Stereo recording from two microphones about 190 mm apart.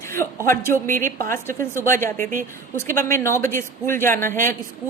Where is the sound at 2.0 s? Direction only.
45° right (ahead or behind).